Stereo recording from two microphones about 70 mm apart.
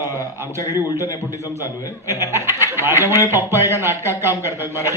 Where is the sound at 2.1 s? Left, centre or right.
Right.